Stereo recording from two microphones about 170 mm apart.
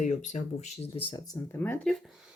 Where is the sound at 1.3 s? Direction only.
15° left (ahead or behind).